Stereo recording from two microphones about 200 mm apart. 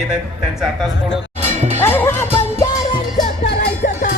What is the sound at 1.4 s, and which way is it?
Music, 35° right (ahead or behind).